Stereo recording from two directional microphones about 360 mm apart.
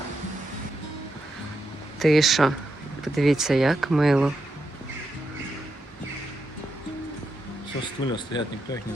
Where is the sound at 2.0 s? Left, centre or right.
Centre.